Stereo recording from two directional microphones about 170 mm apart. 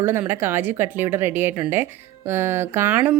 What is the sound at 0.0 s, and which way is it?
Speech, 15° right (ahead or behind).